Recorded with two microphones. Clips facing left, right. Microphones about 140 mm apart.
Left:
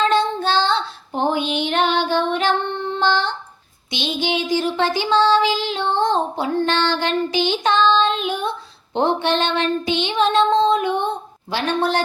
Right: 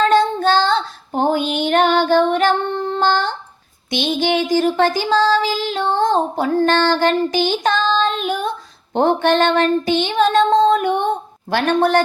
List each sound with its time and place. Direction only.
0.0 s child singing: 45° right (ahead or behind)